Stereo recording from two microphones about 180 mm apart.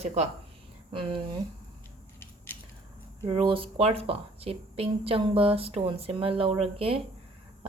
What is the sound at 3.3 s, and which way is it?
A woman's voice, 30° right (ahead or behind).